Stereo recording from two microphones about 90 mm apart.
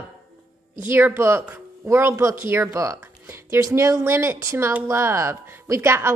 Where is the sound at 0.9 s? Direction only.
25° right (ahead or behind).